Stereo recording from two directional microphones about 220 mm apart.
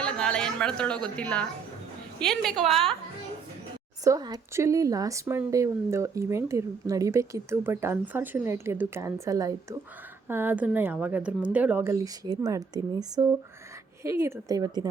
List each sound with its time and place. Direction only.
0.0 s a sound: 5° left (ahead or behind)
2.1 s a woman's voice: 5° left (ahead or behind)
4.0 s speech: 15° right (ahead or behind)